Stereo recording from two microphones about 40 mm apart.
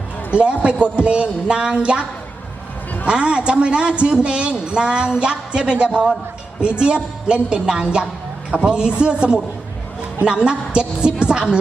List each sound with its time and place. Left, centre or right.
0.3 s a woman's voice: right
3.1 s a woman's voice: right